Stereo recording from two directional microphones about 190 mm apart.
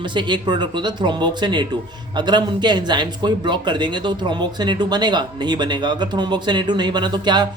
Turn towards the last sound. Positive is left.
turn(degrees=-20)  # may be behind; listen again after turning